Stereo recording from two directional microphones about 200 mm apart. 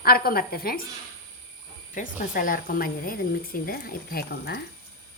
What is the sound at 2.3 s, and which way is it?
A woman's voice, 45° left (ahead or behind).